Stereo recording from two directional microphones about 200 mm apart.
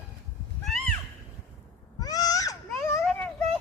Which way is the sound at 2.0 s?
20° left (ahead or behind).